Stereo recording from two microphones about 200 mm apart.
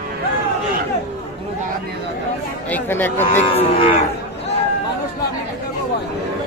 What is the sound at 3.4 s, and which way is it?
Cattle, 30° left (ahead or behind).